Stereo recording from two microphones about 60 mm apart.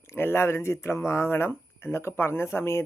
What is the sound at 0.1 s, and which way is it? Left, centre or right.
Speech, left.